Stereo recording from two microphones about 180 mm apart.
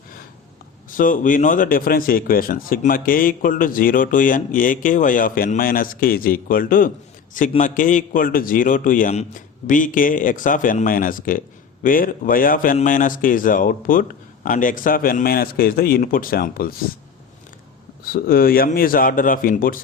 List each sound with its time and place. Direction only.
0.9 s a man's voice: 50° left (ahead or behind)
18.0 s a man's voice: 55° left (ahead or behind)